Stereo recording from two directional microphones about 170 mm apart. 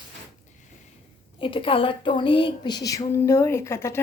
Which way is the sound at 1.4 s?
30° left (ahead or behind).